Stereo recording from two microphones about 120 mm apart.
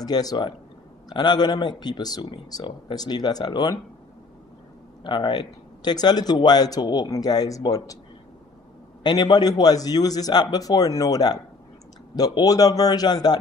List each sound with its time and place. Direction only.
0.0 s speech: 35° left (ahead or behind)
5.0 s speech: 40° left (ahead or behind)
9.0 s speech: 35° left (ahead or behind)